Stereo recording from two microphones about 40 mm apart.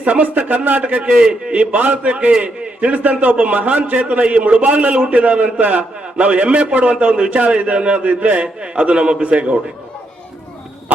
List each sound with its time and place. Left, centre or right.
0.0 s a man's voice: right
1.2 s a man's voice: right
1.5 s a man's voice: right